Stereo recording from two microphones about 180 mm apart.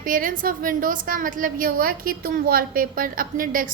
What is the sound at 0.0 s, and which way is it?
A woman's voice, 50° right (ahead or behind).